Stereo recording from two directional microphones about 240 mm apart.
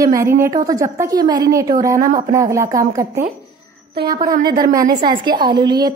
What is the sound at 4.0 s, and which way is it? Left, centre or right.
Speech, right.